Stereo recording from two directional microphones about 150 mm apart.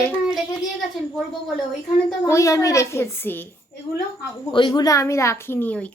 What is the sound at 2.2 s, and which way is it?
A child's voice, 20° left (ahead or behind).